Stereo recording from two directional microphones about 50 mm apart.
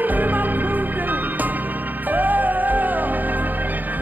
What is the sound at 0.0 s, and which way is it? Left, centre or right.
Music, right.